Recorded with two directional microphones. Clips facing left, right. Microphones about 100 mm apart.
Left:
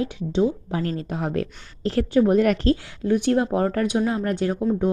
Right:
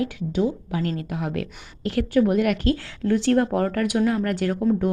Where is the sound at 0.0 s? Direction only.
25° left (ahead or behind).